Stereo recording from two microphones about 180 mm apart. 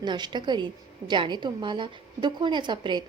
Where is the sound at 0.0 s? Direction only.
25° right (ahead or behind).